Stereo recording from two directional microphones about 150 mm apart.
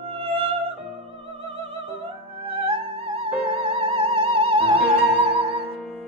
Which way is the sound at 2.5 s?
40° right (ahead or behind).